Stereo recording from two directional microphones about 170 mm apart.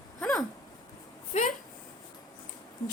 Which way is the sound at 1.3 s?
40° left (ahead or behind).